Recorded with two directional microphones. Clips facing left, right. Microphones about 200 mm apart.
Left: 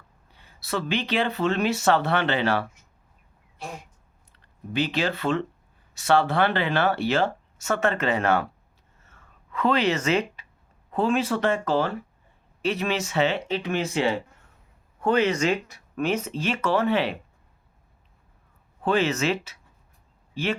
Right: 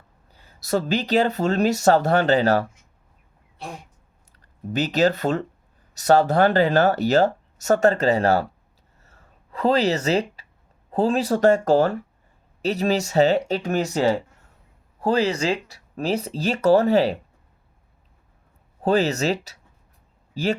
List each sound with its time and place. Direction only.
0.3 s speech: 40° right (ahead or behind)
4.3 s speech: 40° right (ahead or behind)
9.0 s a sound: 35° right (ahead or behind)
10.9 s speech: 35° right (ahead or behind)
18.8 s speech: 40° right (ahead or behind)